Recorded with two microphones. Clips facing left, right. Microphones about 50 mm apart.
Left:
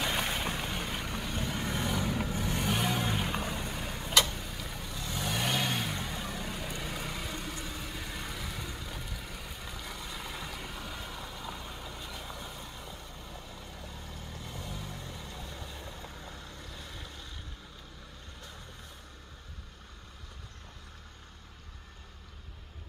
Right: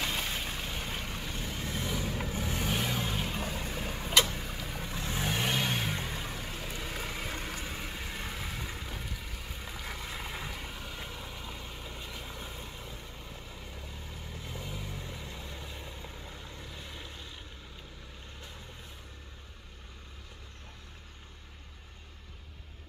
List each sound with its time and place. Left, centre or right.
0.0 s boat: left
0.8 s boat: centre
1.9 s vehicle: centre
3.7 s vehicle: centre
5.3 s vehicle: centre
7.2 s vehicle: right